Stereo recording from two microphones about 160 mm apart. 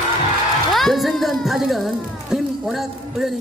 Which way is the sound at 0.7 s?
Centre (ahead or behind).